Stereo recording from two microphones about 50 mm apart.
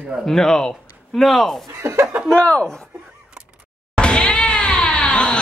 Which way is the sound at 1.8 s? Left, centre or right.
Right.